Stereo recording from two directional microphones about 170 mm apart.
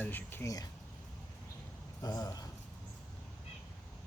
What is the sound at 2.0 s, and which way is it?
Speech, 20° left (ahead or behind).